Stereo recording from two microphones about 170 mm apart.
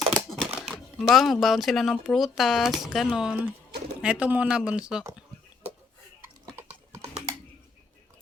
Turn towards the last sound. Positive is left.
turn(degrees=-15)  # may be behind; listen again after turning